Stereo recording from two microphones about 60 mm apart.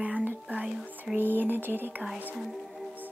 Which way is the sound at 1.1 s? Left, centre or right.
Right.